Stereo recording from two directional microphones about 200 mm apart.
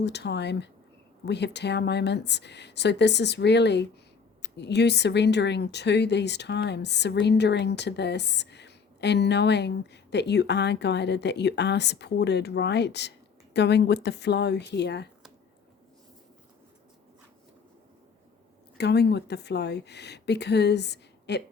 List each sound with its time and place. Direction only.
0.0 s speech: 60° left (ahead or behind)
18.8 s speech: 55° left (ahead or behind)